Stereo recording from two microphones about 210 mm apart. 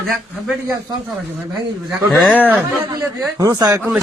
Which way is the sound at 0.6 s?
15° right (ahead or behind).